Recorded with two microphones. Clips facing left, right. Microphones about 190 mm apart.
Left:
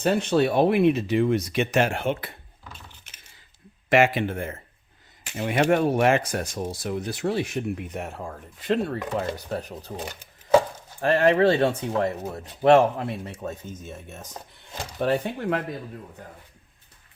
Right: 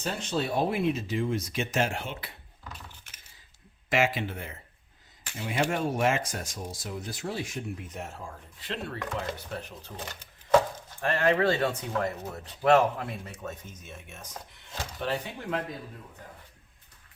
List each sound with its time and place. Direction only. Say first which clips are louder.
0.0 s speech: left 10 dB; 60° left (ahead or behind)
2.7 s keys jangling: even; 25° left (ahead or behind)
3.8 s speech: left 7 dB; 60° left (ahead or behind)
5.4 s speech: left 8 dB; 65° left (ahead or behind); by 9.9 s 40° left (ahead or behind)
11.0 s speech: left 6 dB; 35° left (ahead or behind)
14.9 s speech: left 9 dB; 50° left (ahead or behind)